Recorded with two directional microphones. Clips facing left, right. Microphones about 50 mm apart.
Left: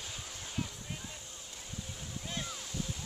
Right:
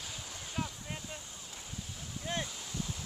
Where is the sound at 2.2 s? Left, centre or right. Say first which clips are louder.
Right 5 dB; right.